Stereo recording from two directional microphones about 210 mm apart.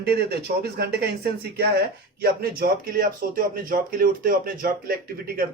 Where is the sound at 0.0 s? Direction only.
45° right (ahead or behind).